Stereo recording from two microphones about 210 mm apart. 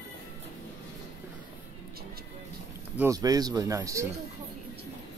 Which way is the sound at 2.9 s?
15° right (ahead or behind).